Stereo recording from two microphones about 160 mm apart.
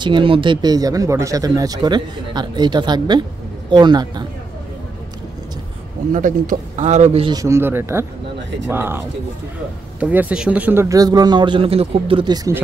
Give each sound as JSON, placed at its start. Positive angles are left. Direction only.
{"t": 0.0, "sound": "speech", "side_deg": -30}
{"t": 6.1, "sound": "a man's voice", "side_deg": -50}
{"t": 7.3, "sound": "speech", "side_deg": -15}